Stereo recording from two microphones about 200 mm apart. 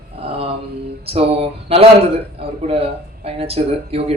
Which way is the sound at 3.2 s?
30° right (ahead or behind).